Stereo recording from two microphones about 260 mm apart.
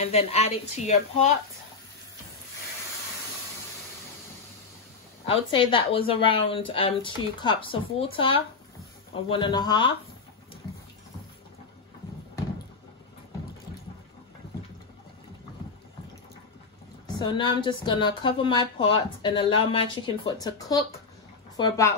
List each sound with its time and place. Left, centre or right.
0.0 s a woman's voice: left
5.2 s a woman's voice: centre
17.1 s a woman's voice: centre